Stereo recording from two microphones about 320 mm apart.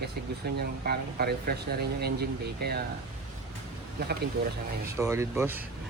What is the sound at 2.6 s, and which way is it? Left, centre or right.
Speech, right.